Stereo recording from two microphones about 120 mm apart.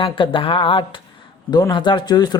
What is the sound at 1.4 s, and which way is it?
Speech, 35° left (ahead or behind).